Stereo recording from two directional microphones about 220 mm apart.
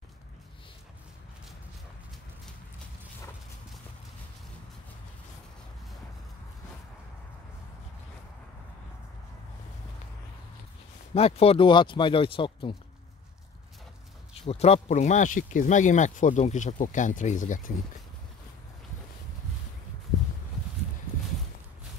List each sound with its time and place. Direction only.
11.1 s speech: 25° left (ahead or behind)
14.3 s speech: 25° left (ahead or behind)